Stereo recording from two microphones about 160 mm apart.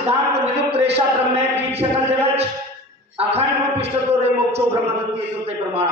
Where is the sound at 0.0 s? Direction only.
40° right (ahead or behind).